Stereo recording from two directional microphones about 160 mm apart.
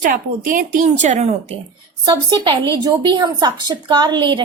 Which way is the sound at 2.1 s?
30° right (ahead or behind).